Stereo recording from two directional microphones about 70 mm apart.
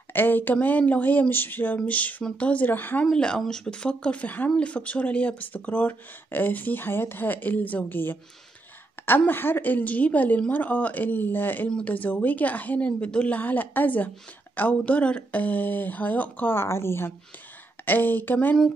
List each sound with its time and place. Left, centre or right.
0.1 s a woman's voice: left
3.1 s a woman's voice: centre; by 16.5 s left
16.5 s a woman's voice: left